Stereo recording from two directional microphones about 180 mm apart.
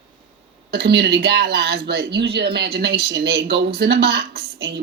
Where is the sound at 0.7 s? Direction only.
65° right (ahead or behind).